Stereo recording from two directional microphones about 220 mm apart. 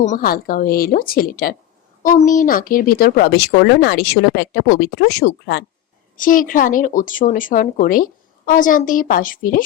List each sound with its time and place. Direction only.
0.0 s speech: 35° left (ahead or behind)
6.1 s speech: 40° left (ahead or behind)